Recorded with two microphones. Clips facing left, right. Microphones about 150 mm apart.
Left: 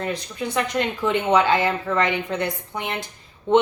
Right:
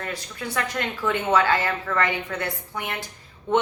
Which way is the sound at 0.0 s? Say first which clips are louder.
Left 5 dB; 20° left (ahead or behind).